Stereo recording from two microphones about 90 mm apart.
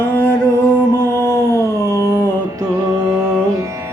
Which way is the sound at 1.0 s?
25° left (ahead or behind).